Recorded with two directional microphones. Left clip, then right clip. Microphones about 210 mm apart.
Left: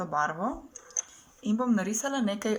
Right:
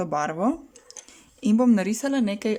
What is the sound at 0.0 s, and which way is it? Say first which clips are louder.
Speech: right 4 dB; 30° right (ahead or behind).